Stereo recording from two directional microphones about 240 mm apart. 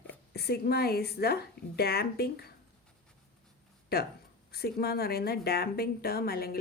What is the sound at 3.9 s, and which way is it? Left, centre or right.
A woman's voice, left.